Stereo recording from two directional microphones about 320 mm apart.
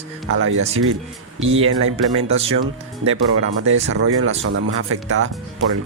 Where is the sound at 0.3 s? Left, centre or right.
Right.